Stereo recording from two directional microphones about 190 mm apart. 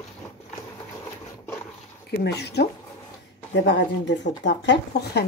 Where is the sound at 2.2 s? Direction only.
60° left (ahead or behind).